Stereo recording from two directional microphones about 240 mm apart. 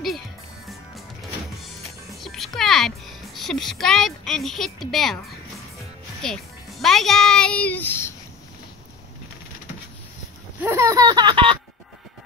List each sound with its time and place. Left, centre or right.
2.1 s music: centre
3.3 s a woman's voice: centre
6.2 s a child's voice: centre
10.6 s speech: centre